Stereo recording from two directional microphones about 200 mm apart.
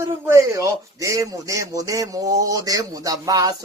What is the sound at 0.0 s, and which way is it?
Speech, 15° right (ahead or behind).